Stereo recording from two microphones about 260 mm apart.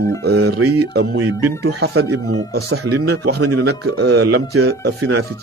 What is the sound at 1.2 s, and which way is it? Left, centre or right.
Speech, right.